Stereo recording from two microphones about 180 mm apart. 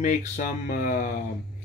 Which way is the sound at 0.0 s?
45° left (ahead or behind).